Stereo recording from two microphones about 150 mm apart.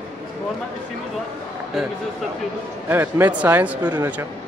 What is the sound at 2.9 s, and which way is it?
A man's voice, 15° right (ahead or behind).